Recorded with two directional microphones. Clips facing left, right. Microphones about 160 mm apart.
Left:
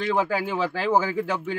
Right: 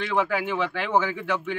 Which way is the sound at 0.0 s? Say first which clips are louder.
Left 1 dB; 35° left (ahead or behind).